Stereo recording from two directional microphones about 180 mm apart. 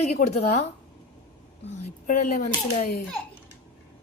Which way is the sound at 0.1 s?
35° left (ahead or behind).